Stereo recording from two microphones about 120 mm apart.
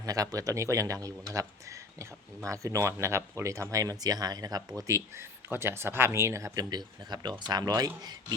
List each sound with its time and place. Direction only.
0.0 s speech: 30° right (ahead or behind)